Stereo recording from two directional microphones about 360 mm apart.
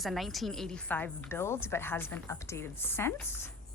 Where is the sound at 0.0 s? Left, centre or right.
Centre.